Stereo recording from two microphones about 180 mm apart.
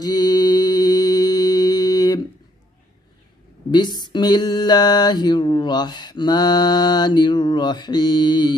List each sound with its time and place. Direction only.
0.0 s mantra: 20° left (ahead or behind)
3.7 s mantra: 25° left (ahead or behind)